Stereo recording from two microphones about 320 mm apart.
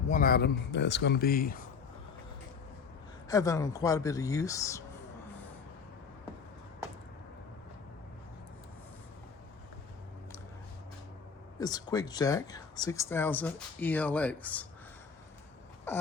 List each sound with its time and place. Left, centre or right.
0.1 s speech: left
3.2 s speech: centre
11.6 s speech: centre
15.9 s a sound: centre